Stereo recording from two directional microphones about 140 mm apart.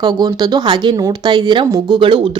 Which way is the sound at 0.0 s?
30° right (ahead or behind).